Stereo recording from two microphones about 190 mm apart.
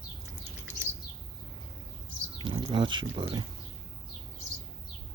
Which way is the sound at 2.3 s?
25° right (ahead or behind).